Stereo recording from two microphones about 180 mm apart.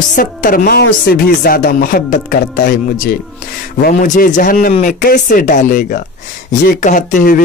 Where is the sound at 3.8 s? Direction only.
45° left (ahead or behind).